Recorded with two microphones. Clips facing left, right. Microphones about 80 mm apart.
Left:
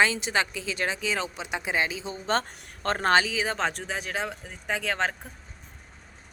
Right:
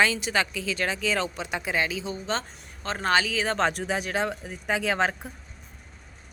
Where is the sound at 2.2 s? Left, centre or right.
Left.